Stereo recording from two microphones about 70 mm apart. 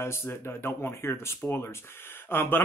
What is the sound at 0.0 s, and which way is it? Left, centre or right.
Speech, left.